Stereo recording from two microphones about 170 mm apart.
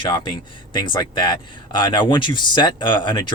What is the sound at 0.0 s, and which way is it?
Speech, 25° left (ahead or behind).